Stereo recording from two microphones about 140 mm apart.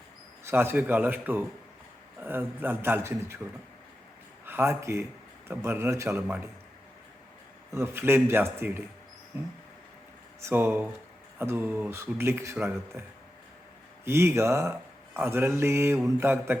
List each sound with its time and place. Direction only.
0.4 s speech: 15° right (ahead or behind)
4.4 s speech: 15° right (ahead or behind)
7.7 s speech: 15° right (ahead or behind)
10.4 s speech: 15° right (ahead or behind)